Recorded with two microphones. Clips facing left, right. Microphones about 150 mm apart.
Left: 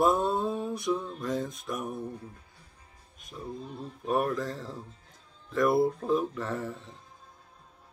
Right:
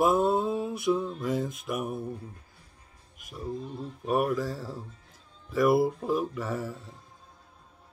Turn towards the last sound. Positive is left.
turn(degrees=-5)  # may be behind; listen again after turning